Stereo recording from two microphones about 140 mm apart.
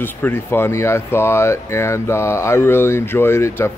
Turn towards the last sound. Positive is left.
turn(degrees=20)  # may be behind; listen again after turning